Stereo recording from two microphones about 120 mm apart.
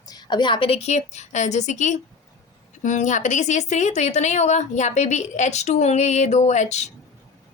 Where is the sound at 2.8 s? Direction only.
90° left; by 6.9 s 70° left (ahead or behind).